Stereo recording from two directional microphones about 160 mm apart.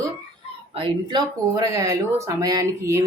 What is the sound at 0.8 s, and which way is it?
Speech, 30° right (ahead or behind).